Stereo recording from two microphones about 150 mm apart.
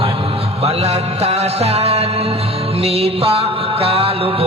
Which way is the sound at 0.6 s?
45° right (ahead or behind).